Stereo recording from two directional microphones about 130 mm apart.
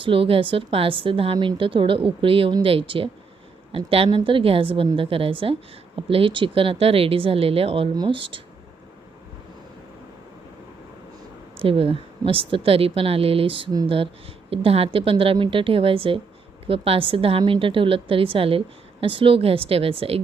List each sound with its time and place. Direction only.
0.0 s a woman's voice: 45° right (ahead or behind)
11.5 s a woman's voice: 45° right (ahead or behind)